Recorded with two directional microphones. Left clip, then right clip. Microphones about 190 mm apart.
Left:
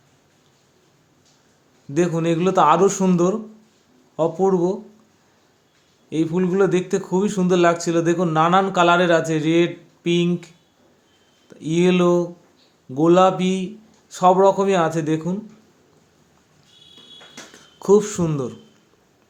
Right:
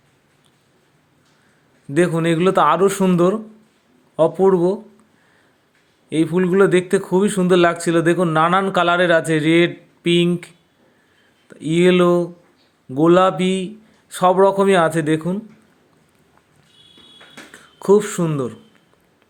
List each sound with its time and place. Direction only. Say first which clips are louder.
1.9 s a man's voice: right 3 dB; 10° right (ahead or behind)
6.1 s a man's voice: right 3 dB; 10° right (ahead or behind)
11.6 s speech: right 4 dB; centre (ahead or behind)
12.0 s speech: right 2 dB; 30° right (ahead or behind)
13.1 s a man's voice: right 1 dB; centre (ahead or behind)
17.8 s speech: right 1 dB; centre (ahead or behind)